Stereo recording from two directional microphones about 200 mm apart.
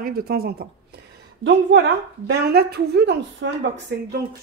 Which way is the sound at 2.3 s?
55° right (ahead or behind).